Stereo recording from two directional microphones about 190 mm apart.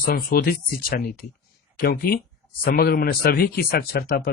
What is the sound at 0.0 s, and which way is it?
Speech, 50° left (ahead or behind).